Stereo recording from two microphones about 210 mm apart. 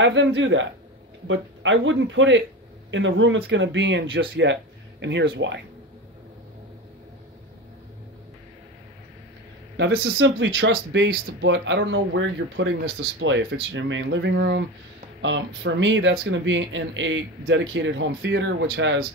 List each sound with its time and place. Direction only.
0.0 s speech: 60° right (ahead or behind)
9.8 s speech: 60° right (ahead or behind)